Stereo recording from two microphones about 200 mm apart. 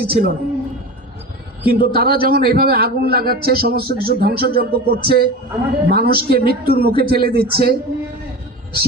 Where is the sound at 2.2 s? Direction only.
50° right (ahead or behind).